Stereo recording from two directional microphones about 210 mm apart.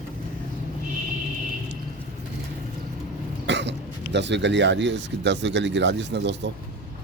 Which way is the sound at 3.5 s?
55° right (ahead or behind).